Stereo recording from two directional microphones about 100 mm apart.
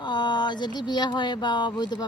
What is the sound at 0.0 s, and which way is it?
A woman's voice, 50° left (ahead or behind).